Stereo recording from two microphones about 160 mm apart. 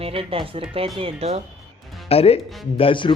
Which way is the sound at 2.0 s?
40° left (ahead or behind).